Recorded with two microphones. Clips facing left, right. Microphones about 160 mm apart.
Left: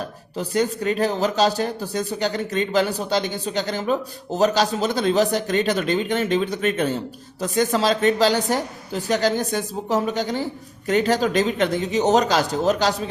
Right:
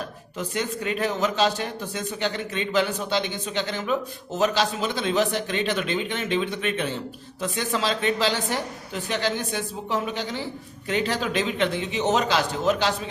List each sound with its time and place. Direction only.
0.3 s a man's voice: 40° left (ahead or behind)